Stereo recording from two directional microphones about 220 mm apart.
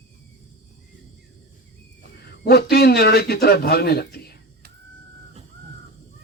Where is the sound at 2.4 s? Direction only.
45° left (ahead or behind).